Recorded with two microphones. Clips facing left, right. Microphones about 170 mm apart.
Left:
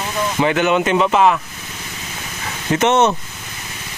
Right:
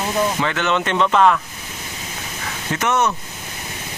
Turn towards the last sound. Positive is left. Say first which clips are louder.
# left 5 dB
turn(degrees=25)  # may be behind; listen again after turning